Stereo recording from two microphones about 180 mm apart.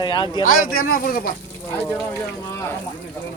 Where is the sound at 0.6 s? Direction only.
55° left (ahead or behind).